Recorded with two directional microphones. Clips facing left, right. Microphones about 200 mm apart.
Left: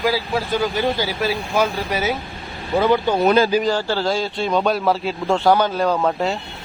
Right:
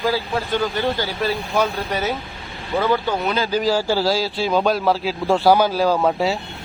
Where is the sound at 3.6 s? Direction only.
10° right (ahead or behind).